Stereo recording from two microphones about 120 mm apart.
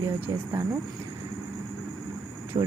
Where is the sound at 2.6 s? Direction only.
35° right (ahead or behind).